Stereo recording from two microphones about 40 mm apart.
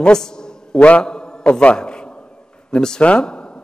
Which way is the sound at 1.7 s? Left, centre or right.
Left.